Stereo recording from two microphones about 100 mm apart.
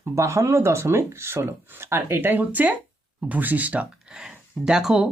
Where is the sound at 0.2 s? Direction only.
30° right (ahead or behind).